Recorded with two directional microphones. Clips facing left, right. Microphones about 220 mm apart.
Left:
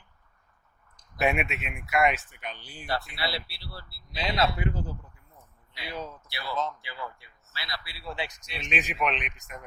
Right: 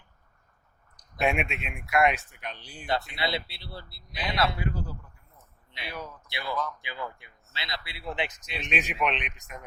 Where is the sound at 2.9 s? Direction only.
20° right (ahead or behind).